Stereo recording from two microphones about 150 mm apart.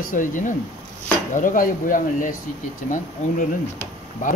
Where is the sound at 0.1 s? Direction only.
60° left (ahead or behind).